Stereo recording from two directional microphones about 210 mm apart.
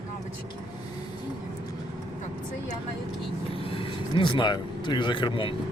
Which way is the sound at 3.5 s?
25° left (ahead or behind).